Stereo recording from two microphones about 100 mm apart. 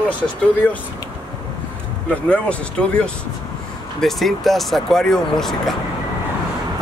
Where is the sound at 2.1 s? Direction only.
10° left (ahead or behind).